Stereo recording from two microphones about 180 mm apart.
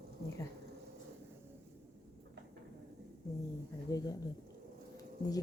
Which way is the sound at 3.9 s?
20° left (ahead or behind).